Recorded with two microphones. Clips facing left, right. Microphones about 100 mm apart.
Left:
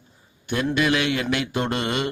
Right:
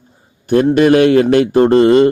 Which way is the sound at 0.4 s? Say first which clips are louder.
Right 12 dB; 45° right (ahead or behind).